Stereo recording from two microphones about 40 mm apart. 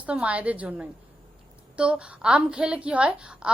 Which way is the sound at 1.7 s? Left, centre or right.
Right.